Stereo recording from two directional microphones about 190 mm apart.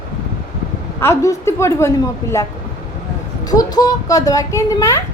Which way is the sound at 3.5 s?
20° left (ahead or behind).